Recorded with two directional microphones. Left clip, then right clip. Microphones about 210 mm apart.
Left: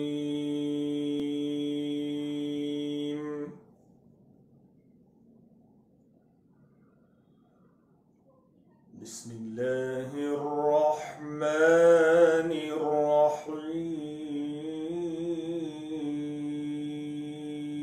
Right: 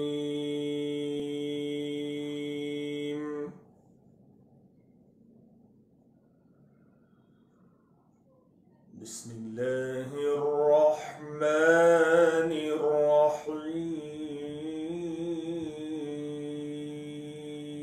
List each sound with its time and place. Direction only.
0.0 s mantra: 5° right (ahead or behind)
9.0 s mantra: 5° right (ahead or behind)
13.7 s a sound: centre (ahead or behind)